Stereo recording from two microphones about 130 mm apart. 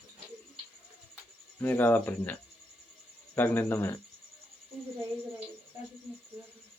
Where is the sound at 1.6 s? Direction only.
15° left (ahead or behind).